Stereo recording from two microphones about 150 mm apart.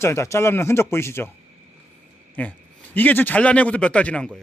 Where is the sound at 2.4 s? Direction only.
10° left (ahead or behind).